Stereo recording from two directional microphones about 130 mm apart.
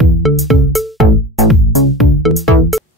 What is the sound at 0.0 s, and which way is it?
Music, centre (ahead or behind).